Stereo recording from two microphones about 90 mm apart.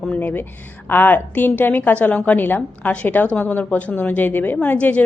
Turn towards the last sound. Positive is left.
turn(degrees=15)  # may be behind; listen again after turning